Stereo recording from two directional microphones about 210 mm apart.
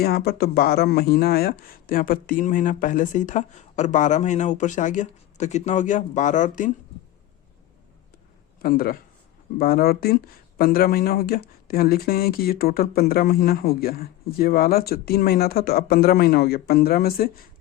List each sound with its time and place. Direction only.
0.0 s speech: 50° left (ahead or behind)
8.6 s speech: 45° left (ahead or behind)